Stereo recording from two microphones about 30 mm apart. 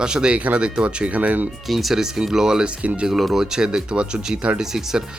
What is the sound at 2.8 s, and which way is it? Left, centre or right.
Speech, right.